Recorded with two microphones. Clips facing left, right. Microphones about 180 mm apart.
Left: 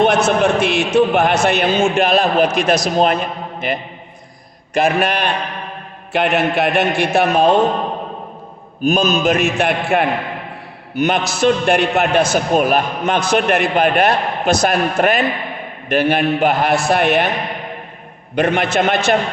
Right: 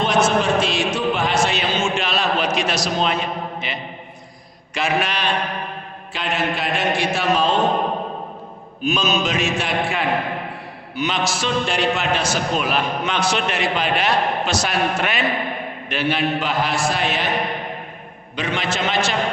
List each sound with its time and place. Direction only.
0.0 s a man's voice: 65° left (ahead or behind)
6.1 s a man's voice: 65° left (ahead or behind)
8.8 s a man's voice: 50° left (ahead or behind)
18.3 s a man's voice: 60° left (ahead or behind)